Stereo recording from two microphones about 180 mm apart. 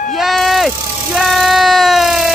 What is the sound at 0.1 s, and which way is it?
Vehicle, centre (ahead or behind).